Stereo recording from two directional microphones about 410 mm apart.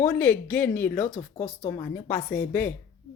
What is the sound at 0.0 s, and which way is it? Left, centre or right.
Speech, centre.